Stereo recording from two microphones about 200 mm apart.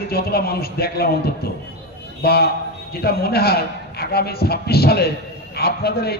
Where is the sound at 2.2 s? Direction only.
50° left (ahead or behind).